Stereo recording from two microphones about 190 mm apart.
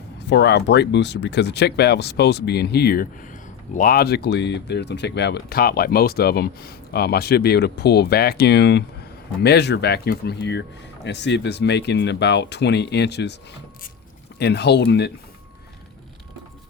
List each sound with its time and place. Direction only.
0.2 s speech: 65° left (ahead or behind)
14.3 s speech: 60° left (ahead or behind)